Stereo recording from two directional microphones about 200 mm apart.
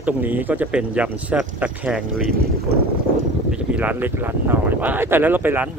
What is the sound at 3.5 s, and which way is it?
Speech, 5° right (ahead or behind).